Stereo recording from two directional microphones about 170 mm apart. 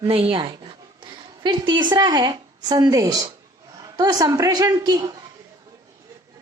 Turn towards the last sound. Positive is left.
turn(degrees=-20)  # may be behind; listen again after turning